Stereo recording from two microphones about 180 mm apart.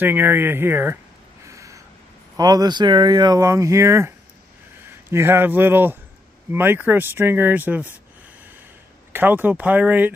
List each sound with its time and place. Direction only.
0.0 s speech: 10° right (ahead or behind)
1.5 s a sound: 15° right (ahead or behind)
2.3 s speech: 20° right (ahead or behind)
5.1 s speech: 15° right (ahead or behind)
9.1 s speech: 10° right (ahead or behind)